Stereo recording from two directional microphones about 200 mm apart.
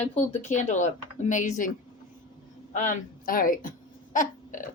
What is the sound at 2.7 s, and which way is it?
Speech, 40° left (ahead or behind).